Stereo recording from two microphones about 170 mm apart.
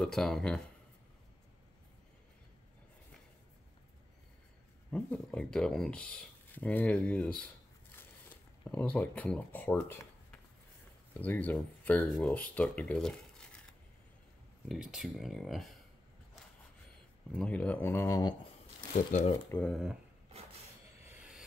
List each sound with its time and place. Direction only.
0.0 s speech: centre (ahead or behind)
4.9 s speech: 5° left (ahead or behind)
8.6 s speech: 10° left (ahead or behind)
11.1 s speech: 10° left (ahead or behind)
14.7 s speech: centre (ahead or behind)
17.3 s speech: 5° left (ahead or behind)
18.9 s speech: 45° left (ahead or behind)
19.3 s speech: 15° left (ahead or behind)
19.7 s speech: centre (ahead or behind)
21.0 s a sound: 5° right (ahead or behind)